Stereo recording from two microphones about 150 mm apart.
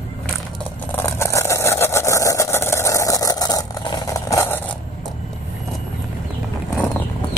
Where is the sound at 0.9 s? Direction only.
15° left (ahead or behind).